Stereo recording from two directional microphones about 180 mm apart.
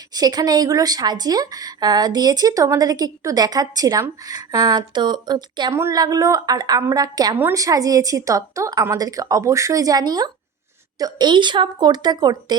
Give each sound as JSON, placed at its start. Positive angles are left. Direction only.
{"t": 0.1, "sound": "a woman's voice", "side_deg": -20}